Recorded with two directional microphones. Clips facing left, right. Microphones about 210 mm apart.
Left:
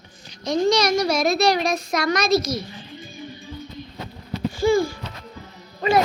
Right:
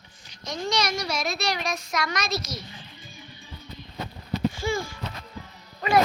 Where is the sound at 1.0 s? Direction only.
50° left (ahead or behind).